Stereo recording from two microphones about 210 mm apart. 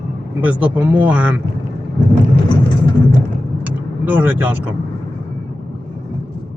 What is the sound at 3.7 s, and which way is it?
Speech, 5° right (ahead or behind).